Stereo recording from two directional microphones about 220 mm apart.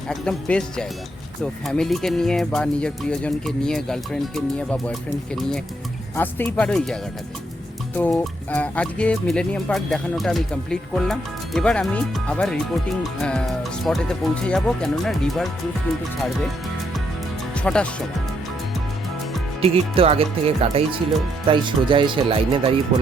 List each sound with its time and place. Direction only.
0.1 s speech: 5° left (ahead or behind)
17.5 s music: 5° left (ahead or behind)
19.6 s speech: 25° right (ahead or behind)